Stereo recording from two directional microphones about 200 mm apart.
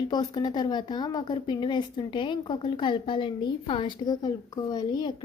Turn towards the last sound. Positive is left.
turn(degrees=20)  # may be behind; listen again after turning